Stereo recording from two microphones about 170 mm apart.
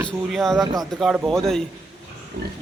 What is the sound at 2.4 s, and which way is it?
Pig, 85° right.